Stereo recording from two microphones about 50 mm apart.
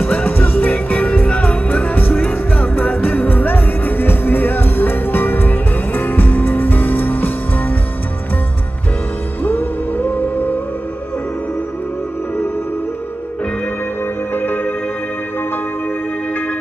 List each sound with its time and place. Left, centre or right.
0.0 s music: left
9.4 s music: left
14.3 s music: left